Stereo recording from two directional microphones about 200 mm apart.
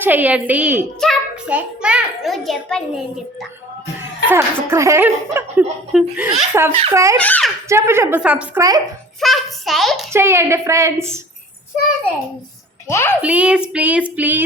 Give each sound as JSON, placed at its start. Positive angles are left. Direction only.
{"t": 0.0, "sound": "a woman's voice", "side_deg": -10}
{"t": 4.3, "sound": "a woman's voice", "side_deg": -15}
{"t": 7.2, "sound": "a child's voice", "side_deg": 5}
{"t": 7.7, "sound": "a woman's voice", "side_deg": -15}
{"t": 10.1, "sound": "a woman's voice", "side_deg": -15}
{"t": 12.9, "sound": "a child's voice", "side_deg": 15}
{"t": 13.2, "sound": "a woman's voice", "side_deg": -5}